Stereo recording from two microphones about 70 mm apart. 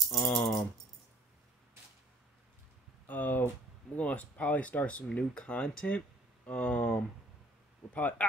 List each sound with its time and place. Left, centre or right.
0.2 s keys jangling: centre
3.1 s a sound: left
3.9 s speech: left